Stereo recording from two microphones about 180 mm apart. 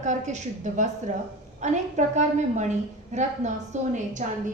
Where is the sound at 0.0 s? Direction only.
40° right (ahead or behind).